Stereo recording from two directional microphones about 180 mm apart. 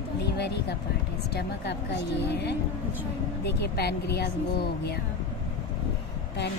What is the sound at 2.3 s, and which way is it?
Speech, 70° left (ahead or behind).